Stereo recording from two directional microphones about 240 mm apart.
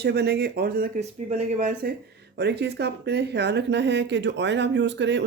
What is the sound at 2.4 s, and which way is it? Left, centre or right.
Speech, right.